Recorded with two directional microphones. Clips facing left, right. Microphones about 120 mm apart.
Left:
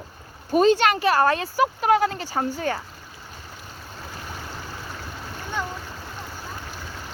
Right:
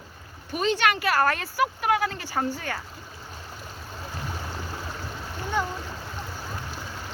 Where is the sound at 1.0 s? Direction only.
20° left (ahead or behind).